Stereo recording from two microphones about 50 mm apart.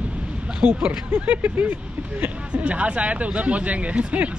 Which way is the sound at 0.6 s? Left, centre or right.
Right.